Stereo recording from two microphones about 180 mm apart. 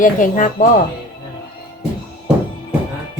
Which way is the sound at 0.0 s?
45° left (ahead or behind).